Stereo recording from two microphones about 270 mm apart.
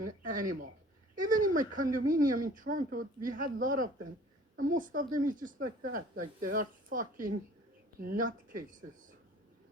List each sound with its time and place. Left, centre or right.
0.3 s speech: right